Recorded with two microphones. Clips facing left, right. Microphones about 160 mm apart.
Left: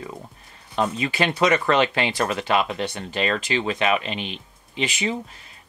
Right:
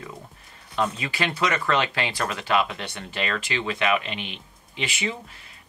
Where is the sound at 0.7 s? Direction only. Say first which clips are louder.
Left 3 dB; 25° left (ahead or behind).